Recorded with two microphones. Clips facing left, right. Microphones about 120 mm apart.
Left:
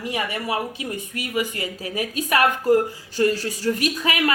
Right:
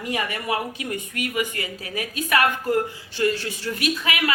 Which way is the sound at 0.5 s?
25° left (ahead or behind).